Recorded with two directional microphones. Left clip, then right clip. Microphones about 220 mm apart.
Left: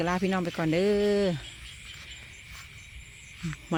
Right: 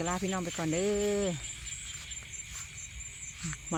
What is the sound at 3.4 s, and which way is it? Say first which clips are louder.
Owl: left 2 dB; 15° left (ahead or behind).